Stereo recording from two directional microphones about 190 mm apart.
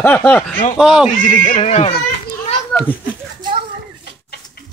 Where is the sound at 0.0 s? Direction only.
10° left (ahead or behind).